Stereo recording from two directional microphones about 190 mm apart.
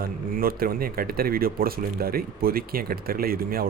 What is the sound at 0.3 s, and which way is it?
Speech, 50° right (ahead or behind).